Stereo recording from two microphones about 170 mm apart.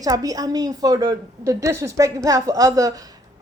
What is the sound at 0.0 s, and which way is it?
A woman's voice, 20° right (ahead or behind).